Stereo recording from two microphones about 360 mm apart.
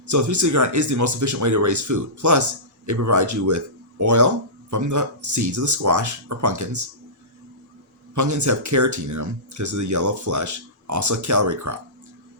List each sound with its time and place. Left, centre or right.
0.1 s speech: right
8.1 s speech: right